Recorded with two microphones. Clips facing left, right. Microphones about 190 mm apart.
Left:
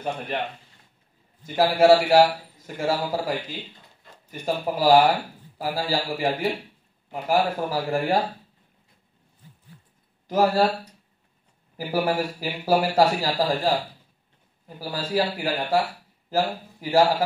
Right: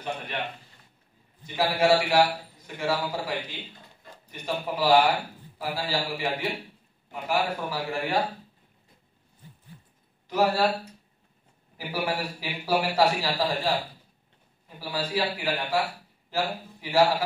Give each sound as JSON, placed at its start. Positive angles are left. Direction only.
{"t": 1.4, "sound": "a man's voice", "side_deg": 45}
{"t": 10.2, "sound": "speech", "side_deg": 45}
{"t": 11.7, "sound": "a man's voice", "side_deg": 45}
{"t": 14.8, "sound": "a man's voice", "side_deg": 45}
{"t": 16.8, "sound": "a man's voice", "side_deg": 45}